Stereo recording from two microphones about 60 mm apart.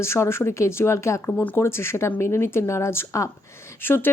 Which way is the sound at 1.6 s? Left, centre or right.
Left.